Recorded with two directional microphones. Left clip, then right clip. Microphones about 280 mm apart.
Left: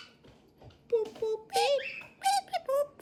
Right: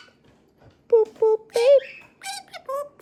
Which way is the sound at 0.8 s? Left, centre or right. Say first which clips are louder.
Right 12 dB; centre.